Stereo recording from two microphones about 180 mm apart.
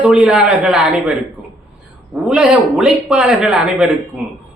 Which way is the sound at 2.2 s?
5° right (ahead or behind).